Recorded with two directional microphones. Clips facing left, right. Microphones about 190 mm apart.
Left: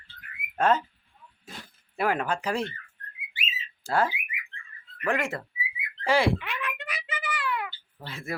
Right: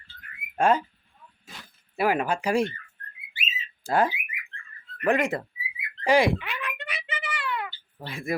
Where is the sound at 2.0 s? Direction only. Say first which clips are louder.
Right 3 dB; 10° right (ahead or behind).